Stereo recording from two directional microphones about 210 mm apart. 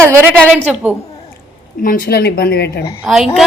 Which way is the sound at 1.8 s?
45° left (ahead or behind).